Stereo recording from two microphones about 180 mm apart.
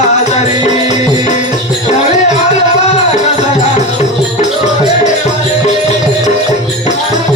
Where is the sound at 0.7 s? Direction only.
40° left (ahead or behind).